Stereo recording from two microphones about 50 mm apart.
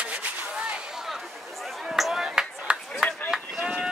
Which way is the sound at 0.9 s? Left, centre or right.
Centre.